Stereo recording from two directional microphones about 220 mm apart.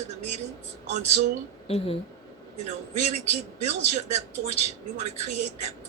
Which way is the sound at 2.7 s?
30° right (ahead or behind).